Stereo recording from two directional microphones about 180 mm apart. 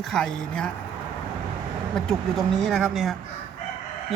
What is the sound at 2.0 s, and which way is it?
A woman's voice, 5° left (ahead or behind).